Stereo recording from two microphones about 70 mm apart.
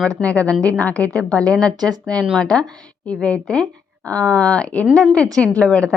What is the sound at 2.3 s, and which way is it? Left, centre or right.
Speech, centre.